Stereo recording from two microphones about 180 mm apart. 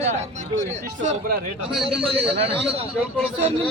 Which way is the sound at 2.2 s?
30° right (ahead or behind).